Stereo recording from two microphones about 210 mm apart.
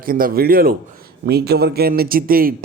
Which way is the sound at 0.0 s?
45° right (ahead or behind).